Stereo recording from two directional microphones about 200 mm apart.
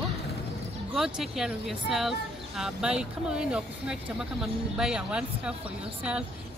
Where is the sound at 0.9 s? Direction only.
Centre (ahead or behind).